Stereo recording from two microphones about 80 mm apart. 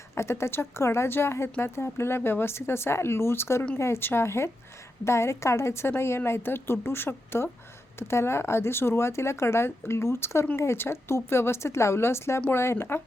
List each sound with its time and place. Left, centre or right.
0.2 s speech: left